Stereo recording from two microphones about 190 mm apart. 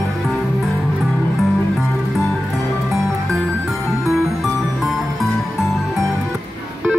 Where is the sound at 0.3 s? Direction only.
Centre (ahead or behind).